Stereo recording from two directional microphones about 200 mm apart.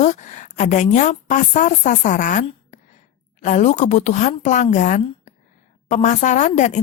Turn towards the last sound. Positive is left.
turn(degrees=35)  # may be behind; listen again after turning